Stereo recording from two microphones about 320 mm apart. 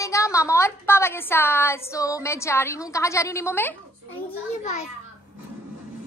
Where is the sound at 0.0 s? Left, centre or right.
Centre.